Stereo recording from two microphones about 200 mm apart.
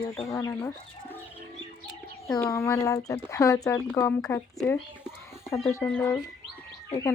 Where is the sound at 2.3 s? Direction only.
15° left (ahead or behind).